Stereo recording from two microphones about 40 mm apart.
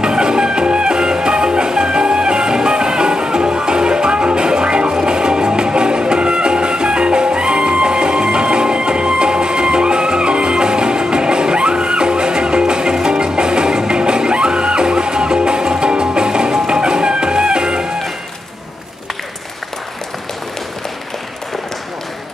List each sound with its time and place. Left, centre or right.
0.0 s music: right